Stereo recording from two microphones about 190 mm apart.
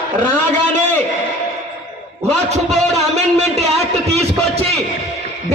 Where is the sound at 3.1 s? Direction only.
35° right (ahead or behind).